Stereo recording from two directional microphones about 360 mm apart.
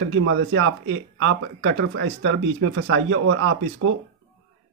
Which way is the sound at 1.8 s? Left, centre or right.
Right.